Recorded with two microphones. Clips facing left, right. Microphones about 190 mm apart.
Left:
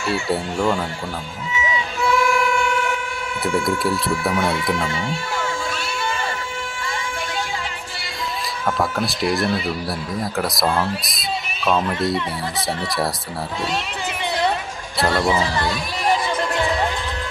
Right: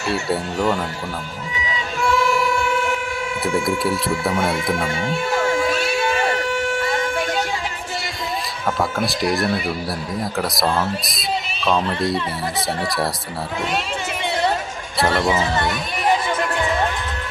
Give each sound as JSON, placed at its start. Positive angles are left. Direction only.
{"t": 0.3, "sound": "speech", "side_deg": 0}
{"t": 2.0, "sound": "violin", "side_deg": 0}
{"t": 3.4, "sound": "speech", "side_deg": 0}
{"t": 4.9, "sound": "a sound", "side_deg": -60}
{"t": 8.6, "sound": "speech", "side_deg": 0}
{"t": 15.3, "sound": "speech", "side_deg": -20}